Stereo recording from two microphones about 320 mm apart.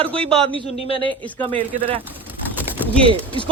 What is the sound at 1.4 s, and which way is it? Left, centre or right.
Speech, centre.